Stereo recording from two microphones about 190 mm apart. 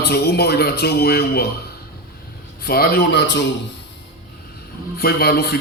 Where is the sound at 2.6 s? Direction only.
55° left (ahead or behind).